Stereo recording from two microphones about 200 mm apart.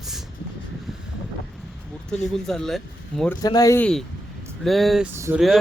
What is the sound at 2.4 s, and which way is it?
Speech, centre (ahead or behind).